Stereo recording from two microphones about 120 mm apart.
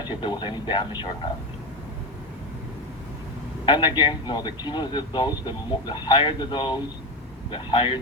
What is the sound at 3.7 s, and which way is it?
A man's voice, 40° left (ahead or behind).